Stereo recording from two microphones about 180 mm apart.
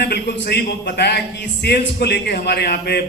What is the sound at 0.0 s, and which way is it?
A man's voice, 60° left (ahead or behind).